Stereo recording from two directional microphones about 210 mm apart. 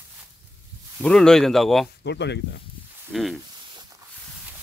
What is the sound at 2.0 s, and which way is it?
Speech, 55° left (ahead or behind).